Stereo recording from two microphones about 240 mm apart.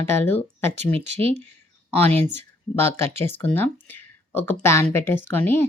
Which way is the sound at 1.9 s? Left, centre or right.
Centre.